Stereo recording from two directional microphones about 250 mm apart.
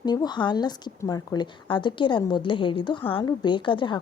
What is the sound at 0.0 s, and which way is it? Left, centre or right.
A woman's voice, centre.